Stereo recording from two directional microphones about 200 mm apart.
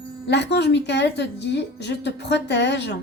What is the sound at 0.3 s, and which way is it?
A woman's voice, 55° left (ahead or behind).